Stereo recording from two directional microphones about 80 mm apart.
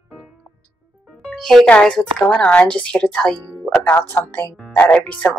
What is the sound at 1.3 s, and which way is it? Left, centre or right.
Speech, centre.